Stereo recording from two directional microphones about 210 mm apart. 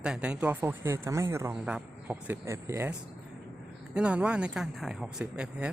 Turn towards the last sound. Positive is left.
turn(degrees=-5)  # may be behind; listen again after turning